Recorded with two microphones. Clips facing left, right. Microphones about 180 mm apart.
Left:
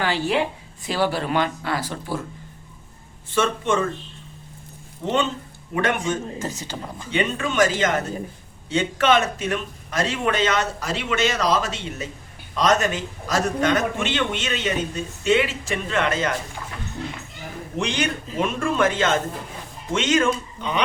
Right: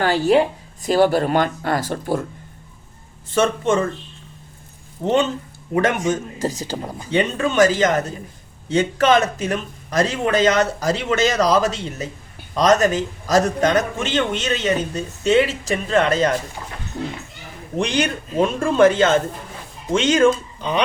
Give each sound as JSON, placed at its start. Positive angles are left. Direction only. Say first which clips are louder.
{"t": 0.0, "sound": "speech", "louder": "right 6 dB", "side_deg": -40}
{"t": 3.3, "sound": "a man's voice", "louder": "right 4 dB", "side_deg": -40}
{"t": 5.0, "sound": "a man's voice", "louder": "right 5 dB", "side_deg": -40}
{"t": 17.7, "sound": "a man's voice", "louder": "right 4 dB", "side_deg": -35}